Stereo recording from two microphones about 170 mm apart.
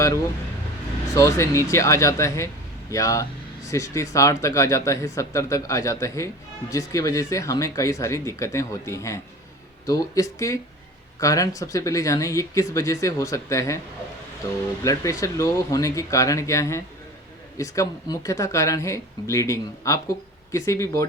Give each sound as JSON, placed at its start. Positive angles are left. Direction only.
{"t": 1.1, "sound": "speech", "side_deg": 15}